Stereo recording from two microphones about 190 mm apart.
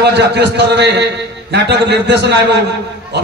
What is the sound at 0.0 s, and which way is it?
A man's voice, 65° right (ahead or behind).